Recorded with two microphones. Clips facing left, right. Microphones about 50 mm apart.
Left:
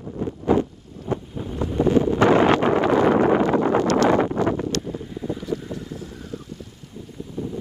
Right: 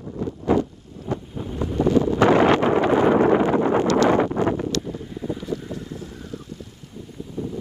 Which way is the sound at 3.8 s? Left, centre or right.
Left.